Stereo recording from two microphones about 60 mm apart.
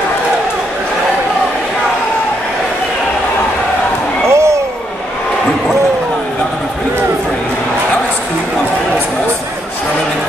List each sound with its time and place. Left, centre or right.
4.3 s basketball bounce: right